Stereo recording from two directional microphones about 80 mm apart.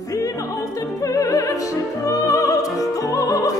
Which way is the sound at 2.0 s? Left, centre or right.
Left.